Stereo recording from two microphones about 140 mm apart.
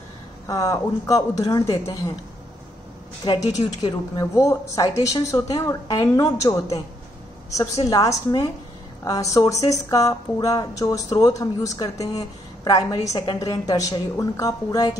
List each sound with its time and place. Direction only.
0.5 s speech: 25° left (ahead or behind)
3.2 s a woman's voice: 30° left (ahead or behind)